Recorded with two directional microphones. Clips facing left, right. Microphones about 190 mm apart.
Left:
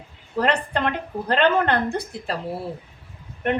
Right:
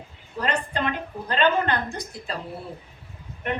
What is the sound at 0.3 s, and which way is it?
A woman's voice, 60° left (ahead or behind).